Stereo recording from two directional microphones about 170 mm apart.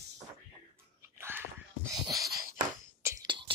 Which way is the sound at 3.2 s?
30° right (ahead or behind).